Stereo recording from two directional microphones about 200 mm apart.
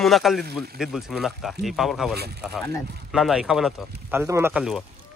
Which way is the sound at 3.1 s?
Centre (ahead or behind).